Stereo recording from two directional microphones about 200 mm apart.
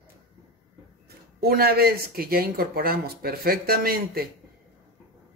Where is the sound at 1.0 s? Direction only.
50° right (ahead or behind).